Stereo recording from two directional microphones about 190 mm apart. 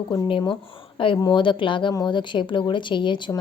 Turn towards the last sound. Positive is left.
turn(degrees=25)  # may be behind; listen again after turning